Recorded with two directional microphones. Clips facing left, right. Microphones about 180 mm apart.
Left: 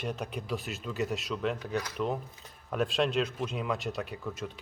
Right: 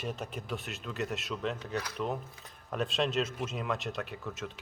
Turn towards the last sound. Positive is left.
turn(degrees=0)  # may be behind; listen again after turning